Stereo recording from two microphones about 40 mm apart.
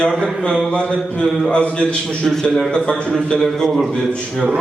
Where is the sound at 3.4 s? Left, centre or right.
Centre.